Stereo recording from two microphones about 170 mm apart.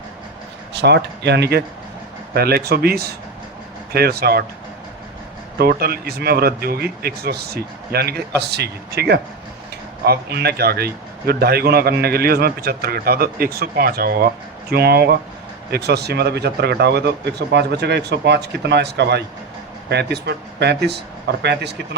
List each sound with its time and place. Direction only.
0.7 s speech: 80° right
5.5 s speech: 65° right (ahead or behind)